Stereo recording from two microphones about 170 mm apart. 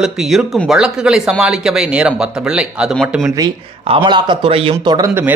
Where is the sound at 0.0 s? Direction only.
Centre (ahead or behind).